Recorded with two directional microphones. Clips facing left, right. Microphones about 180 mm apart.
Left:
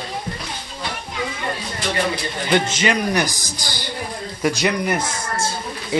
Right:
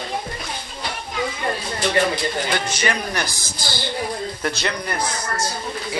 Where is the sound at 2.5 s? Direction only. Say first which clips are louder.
Left 5 dB; 20° left (ahead or behind).